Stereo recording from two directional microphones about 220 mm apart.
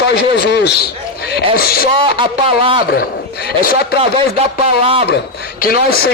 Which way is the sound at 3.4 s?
45° left (ahead or behind).